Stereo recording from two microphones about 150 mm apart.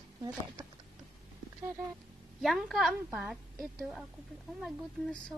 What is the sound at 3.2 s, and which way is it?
A woman's voice, 10° right (ahead or behind).